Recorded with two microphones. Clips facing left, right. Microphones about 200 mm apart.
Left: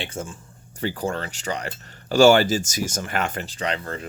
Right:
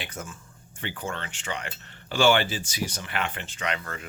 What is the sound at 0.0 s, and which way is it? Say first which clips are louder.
Speech: left 6 dB; 30° left (ahead or behind).